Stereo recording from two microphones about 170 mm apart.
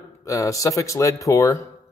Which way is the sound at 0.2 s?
20° left (ahead or behind).